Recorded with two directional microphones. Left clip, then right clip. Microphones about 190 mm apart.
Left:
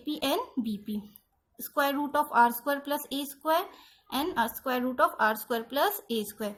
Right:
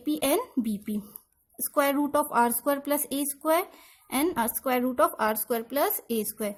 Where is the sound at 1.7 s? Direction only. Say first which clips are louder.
Right 3 dB; 45° right (ahead or behind).